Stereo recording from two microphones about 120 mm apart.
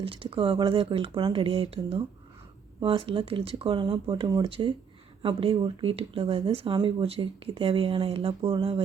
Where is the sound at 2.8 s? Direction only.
45° right (ahead or behind).